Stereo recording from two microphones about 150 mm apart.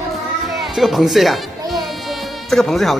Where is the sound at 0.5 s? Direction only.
Centre (ahead or behind).